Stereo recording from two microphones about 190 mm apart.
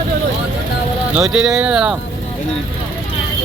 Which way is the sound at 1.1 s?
5° right (ahead or behind).